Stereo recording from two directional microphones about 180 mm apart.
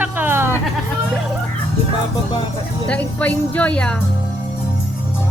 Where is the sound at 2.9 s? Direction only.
10° left (ahead or behind).